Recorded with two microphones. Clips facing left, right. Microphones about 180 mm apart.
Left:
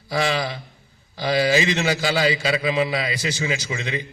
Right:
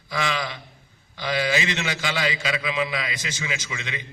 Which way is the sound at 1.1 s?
40° left (ahead or behind).